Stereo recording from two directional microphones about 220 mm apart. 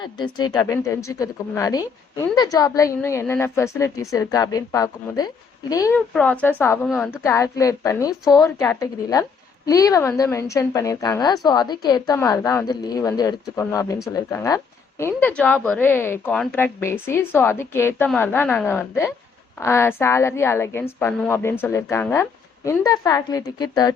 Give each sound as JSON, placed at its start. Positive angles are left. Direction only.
{"t": 0.0, "sound": "a woman's voice", "side_deg": 20}
{"t": 7.1, "sound": "a woman's voice", "side_deg": 10}